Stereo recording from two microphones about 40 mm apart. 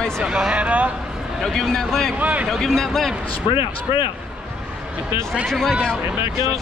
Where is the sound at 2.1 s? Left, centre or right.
Right.